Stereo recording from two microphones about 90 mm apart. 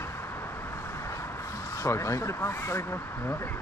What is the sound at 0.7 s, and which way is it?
Vehicle, 30° left (ahead or behind).